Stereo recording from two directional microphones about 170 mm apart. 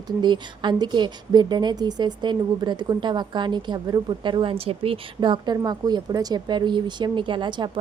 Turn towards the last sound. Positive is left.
turn(degrees=-25)  # may be behind; listen again after turning